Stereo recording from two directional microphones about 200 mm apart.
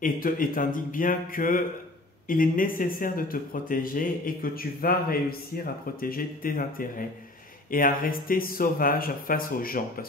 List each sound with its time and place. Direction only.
0.0 s speech: 45° left (ahead or behind)